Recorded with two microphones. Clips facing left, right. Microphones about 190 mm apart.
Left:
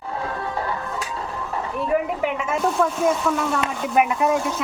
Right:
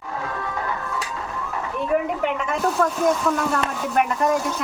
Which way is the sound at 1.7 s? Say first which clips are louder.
Even; centre (ahead or behind).